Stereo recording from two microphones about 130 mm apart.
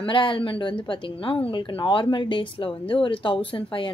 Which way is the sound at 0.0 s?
40° left (ahead or behind).